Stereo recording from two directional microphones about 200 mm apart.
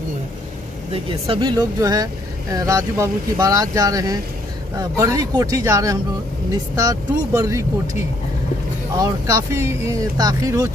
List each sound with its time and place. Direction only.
1.2 s speech: 25° right (ahead or behind)
8.9 s speech: 15° right (ahead or behind)